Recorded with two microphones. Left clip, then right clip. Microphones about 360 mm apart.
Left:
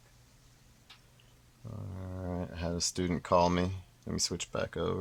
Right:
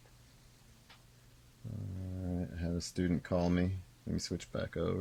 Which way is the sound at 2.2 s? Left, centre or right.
Left.